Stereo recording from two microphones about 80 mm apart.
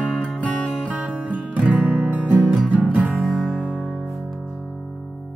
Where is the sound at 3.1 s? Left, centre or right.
Centre.